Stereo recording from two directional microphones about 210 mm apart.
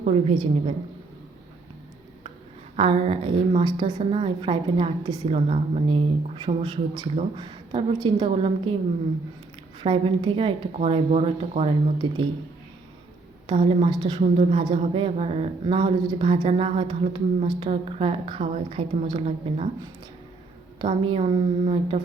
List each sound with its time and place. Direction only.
0.0 s a woman's voice: 30° right (ahead or behind)
2.7 s a woman's voice: 25° right (ahead or behind)
9.8 s a woman's voice: 25° right (ahead or behind)
13.5 s a woman's voice: 25° right (ahead or behind)
20.7 s a woman's voice: 25° right (ahead or behind)